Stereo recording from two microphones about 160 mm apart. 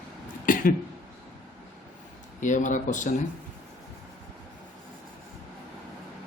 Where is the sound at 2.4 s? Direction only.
50° left (ahead or behind).